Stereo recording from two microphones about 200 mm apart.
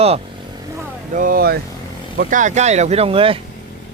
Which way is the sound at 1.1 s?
45° right (ahead or behind).